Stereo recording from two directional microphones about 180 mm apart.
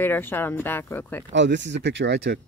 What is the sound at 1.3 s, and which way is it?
Speech, 80° right.